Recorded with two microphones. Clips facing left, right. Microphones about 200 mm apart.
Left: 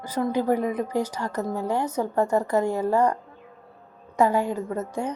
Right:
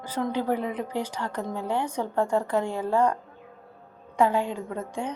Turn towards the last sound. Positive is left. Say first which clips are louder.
# left 4 dB
turn(degrees=5)  # may be behind; listen again after turning